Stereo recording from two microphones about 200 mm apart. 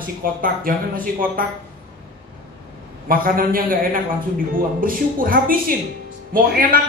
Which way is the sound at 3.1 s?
45° right (ahead or behind).